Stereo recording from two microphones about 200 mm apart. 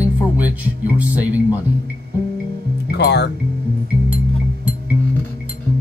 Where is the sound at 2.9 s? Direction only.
55° left (ahead or behind).